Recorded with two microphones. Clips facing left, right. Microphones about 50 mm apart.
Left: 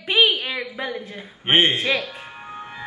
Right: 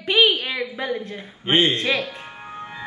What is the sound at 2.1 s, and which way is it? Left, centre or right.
Music, centre.